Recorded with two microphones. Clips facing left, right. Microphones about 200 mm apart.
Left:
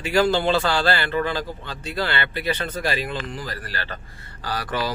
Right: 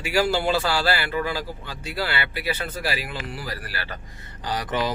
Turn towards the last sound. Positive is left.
turn(degrees=-20)  # may be behind; listen again after turning